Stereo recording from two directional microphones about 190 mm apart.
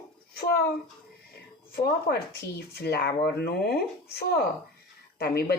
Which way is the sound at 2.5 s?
55° left (ahead or behind).